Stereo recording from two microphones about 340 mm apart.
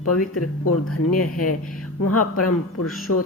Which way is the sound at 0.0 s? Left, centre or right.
Left.